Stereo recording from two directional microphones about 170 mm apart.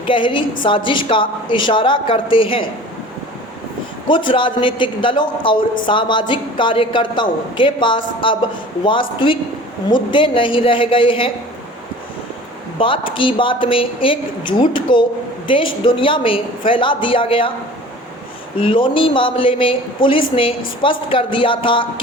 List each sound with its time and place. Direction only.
0.0 s a man's voice: 30° left (ahead or behind)
4.1 s a man's voice: 30° left (ahead or behind)
12.8 s a woman's voice: 30° left (ahead or behind)
18.6 s a woman's voice: 30° left (ahead or behind)